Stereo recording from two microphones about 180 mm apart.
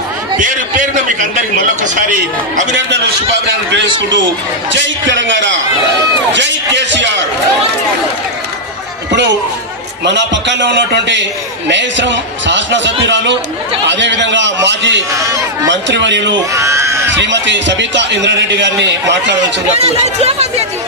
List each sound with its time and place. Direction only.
2.0 s speech: 45° right (ahead or behind)
4.7 s a man's voice: 90° right
10.0 s a man's voice: 75° right (ahead or behind)
15.1 s speech: 15° right (ahead or behind)
15.7 s a man's voice: 80° right
16.5 s a sound: 15° right (ahead or behind)
17.1 s a man's voice: 80° right
19.7 s speech: 35° right (ahead or behind)